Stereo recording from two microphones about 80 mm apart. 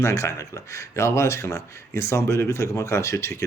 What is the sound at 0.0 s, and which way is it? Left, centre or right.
Speech, left.